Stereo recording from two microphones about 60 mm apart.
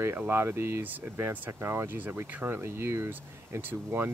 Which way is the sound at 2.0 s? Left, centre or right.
Right.